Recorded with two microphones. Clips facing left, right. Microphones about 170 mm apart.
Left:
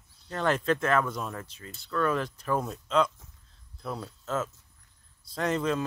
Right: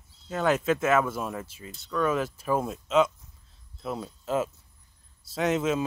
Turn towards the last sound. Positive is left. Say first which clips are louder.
# right 2 dB
turn(degrees=-5)  # may be behind; listen again after turning